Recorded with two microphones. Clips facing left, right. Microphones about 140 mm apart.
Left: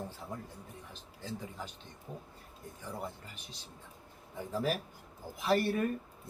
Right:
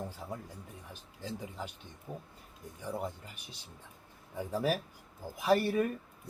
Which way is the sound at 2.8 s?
15° right (ahead or behind).